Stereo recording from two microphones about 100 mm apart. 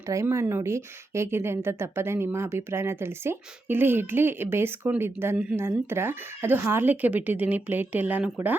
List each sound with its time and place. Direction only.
0.1 s a woman's voice: 30° right (ahead or behind)